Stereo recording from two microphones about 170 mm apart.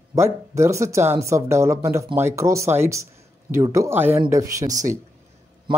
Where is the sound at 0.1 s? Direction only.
15° right (ahead or behind).